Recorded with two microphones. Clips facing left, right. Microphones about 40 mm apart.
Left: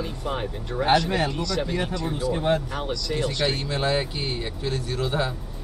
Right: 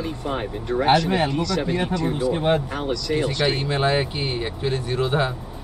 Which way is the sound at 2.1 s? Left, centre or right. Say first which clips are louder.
Right 2 dB; right.